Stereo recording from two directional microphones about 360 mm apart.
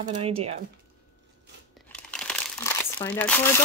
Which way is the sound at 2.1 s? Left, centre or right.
Centre.